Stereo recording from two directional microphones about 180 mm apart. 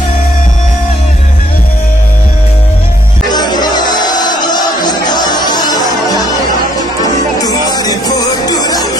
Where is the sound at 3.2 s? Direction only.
20° left (ahead or behind).